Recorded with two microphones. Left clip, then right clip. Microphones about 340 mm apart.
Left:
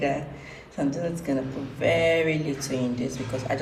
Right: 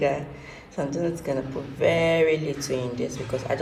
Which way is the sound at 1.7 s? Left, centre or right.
Centre.